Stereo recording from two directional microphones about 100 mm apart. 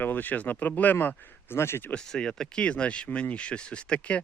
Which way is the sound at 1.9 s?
10° left (ahead or behind).